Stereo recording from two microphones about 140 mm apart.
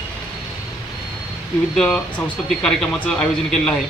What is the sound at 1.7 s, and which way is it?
Speech, 5° left (ahead or behind).